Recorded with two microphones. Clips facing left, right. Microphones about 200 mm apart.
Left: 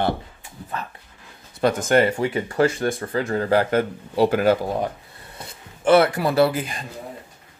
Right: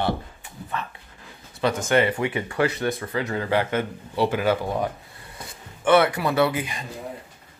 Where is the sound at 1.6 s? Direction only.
45° left (ahead or behind).